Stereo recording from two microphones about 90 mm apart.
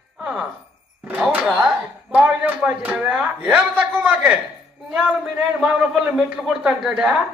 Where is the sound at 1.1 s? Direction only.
5° right (ahead or behind).